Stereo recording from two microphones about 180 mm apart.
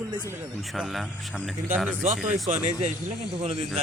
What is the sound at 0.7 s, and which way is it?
Speech, centre (ahead or behind).